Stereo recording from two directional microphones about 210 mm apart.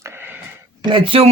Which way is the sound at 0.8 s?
25° right (ahead or behind).